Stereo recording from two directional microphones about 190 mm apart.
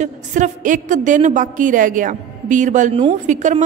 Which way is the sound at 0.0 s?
40° right (ahead or behind).